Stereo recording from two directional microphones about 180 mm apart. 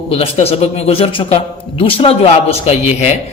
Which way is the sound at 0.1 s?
35° left (ahead or behind).